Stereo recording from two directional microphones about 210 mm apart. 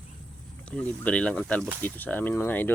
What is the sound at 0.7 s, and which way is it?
Speech, 5° left (ahead or behind).